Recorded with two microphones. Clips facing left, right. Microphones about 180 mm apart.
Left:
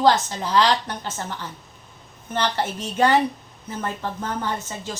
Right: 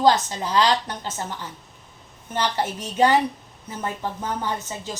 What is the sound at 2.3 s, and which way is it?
A woman's voice, 15° right (ahead or behind).